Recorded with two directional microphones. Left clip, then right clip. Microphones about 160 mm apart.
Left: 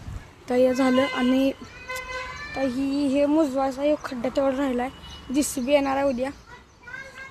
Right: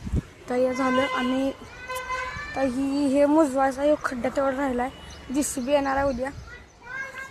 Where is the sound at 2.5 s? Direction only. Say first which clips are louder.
Even; 10° left (ahead or behind).